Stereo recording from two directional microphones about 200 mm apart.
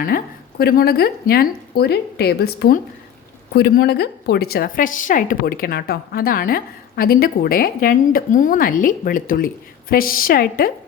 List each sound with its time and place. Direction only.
0.6 s a woman's voice: 50° left (ahead or behind)